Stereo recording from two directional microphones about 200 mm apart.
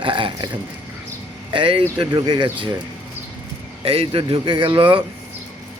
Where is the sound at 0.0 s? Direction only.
25° right (ahead or behind).